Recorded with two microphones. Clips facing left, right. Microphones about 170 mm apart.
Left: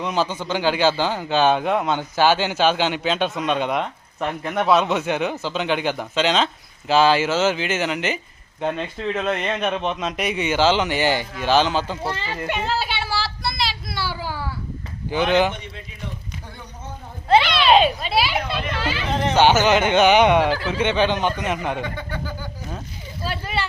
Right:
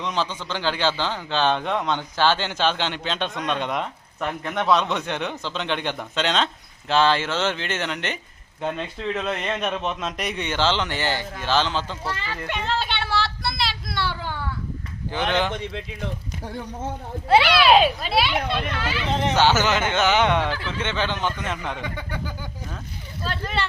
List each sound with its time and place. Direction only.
0.0 s speech: 10° left (ahead or behind)
12.0 s a child's voice: 25° left (ahead or behind)
12.4 s a sound: 5° left (ahead or behind)
15.1 s speech: 10° left (ahead or behind)
15.5 s speech: 90° right
17.2 s speech: 10° right (ahead or behind)
19.4 s speech: 15° left (ahead or behind)
21.8 s speech: 10° right (ahead or behind)
23.2 s speech: 10° left (ahead or behind)